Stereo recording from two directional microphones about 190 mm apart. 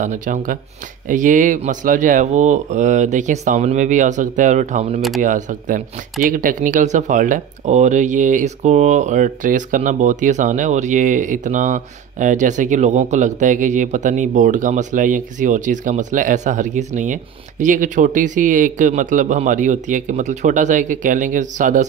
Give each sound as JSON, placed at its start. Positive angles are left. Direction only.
{"t": 0.0, "sound": "speech", "side_deg": -40}